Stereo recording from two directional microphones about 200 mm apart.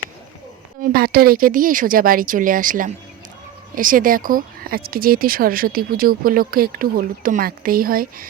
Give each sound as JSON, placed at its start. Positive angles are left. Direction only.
{"t": 0.8, "sound": "speech", "side_deg": -50}